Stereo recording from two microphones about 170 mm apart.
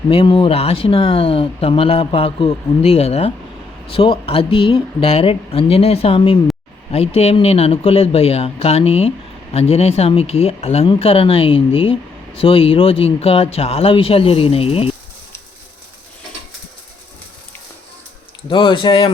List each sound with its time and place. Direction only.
0.1 s speech: 30° left (ahead or behind)
18.4 s speech: 30° left (ahead or behind)